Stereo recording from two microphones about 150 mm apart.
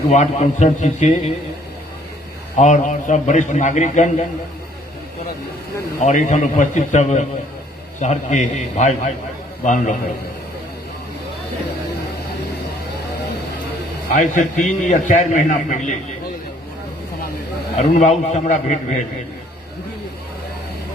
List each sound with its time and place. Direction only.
0.1 s a man's voice: 50° left (ahead or behind)
2.6 s a man's voice: 55° left (ahead or behind)
6.0 s a man's voice: 50° left (ahead or behind)
14.2 s a man's voice: 55° left (ahead or behind)
17.7 s a man's voice: 50° left (ahead or behind)